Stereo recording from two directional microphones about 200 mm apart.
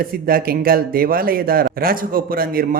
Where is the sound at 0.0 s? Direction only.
45° right (ahead or behind).